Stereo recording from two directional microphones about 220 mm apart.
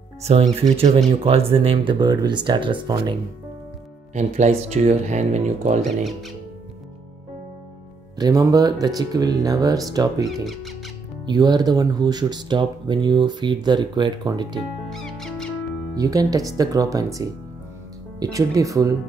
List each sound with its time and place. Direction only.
0.2 s speech: 30° right (ahead or behind)
4.1 s speech: 30° right (ahead or behind)
5.9 s speech: centre (ahead or behind)
8.2 s speech: 15° right (ahead or behind)
10.2 s speech: centre (ahead or behind)
11.2 s speech: 20° right (ahead or behind)
14.9 s music: centre (ahead or behind)
15.9 s speech: 15° right (ahead or behind)